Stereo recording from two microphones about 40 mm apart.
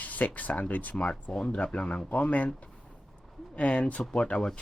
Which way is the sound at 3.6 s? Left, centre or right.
Left.